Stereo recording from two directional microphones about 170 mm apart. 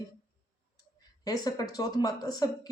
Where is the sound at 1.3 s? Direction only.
20° left (ahead or behind).